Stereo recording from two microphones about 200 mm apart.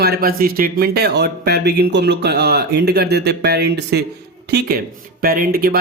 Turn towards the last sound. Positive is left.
turn(degrees=-50)  # may be behind; listen again after turning